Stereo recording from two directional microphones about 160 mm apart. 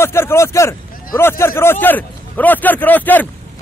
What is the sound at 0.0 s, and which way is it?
A man's voice, 15° left (ahead or behind).